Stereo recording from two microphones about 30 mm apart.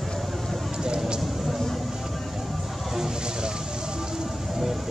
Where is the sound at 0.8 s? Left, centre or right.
Right.